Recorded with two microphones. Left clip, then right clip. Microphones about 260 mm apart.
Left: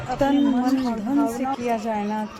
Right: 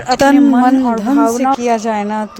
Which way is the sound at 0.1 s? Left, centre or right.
Right.